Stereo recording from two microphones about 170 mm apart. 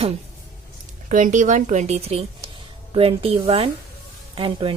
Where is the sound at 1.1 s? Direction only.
50° right (ahead or behind).